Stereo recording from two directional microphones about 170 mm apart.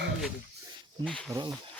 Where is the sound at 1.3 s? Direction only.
25° right (ahead or behind).